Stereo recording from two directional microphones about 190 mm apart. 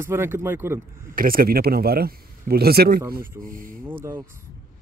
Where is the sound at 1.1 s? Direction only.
50° right (ahead or behind).